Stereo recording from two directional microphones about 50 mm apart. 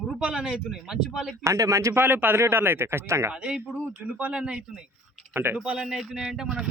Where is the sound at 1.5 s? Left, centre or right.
Right.